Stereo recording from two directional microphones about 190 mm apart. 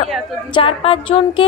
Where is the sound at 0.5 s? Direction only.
30° left (ahead or behind).